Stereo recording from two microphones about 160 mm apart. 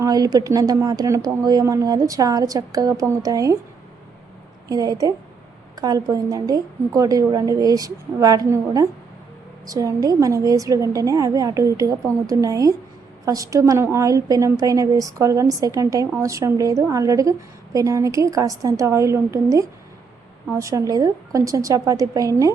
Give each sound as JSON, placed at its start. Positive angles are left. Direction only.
{"t": 0.0, "sound": "a woman's voice", "side_deg": -25}
{"t": 4.7, "sound": "a woman's voice", "side_deg": -25}